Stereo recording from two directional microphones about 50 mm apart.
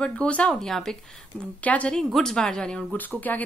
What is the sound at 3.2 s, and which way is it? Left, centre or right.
Speech, left.